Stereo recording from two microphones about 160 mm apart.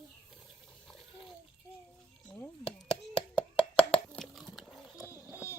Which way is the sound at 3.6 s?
5° left (ahead or behind).